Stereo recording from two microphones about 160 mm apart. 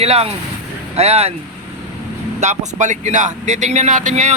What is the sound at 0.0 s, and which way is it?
Speech, 40° right (ahead or behind).